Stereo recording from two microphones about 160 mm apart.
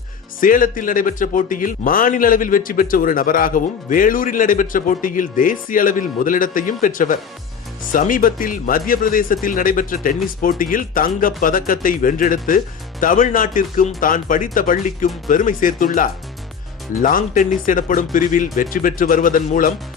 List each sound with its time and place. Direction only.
0.3 s speech: 60° left (ahead or behind)